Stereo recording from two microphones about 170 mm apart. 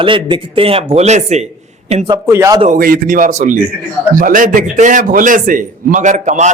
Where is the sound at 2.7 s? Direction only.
60° right (ahead or behind).